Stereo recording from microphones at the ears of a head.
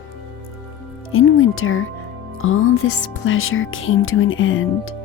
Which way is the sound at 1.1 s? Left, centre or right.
Left.